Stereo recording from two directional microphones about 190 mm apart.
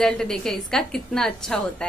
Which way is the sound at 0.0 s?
5° left (ahead or behind).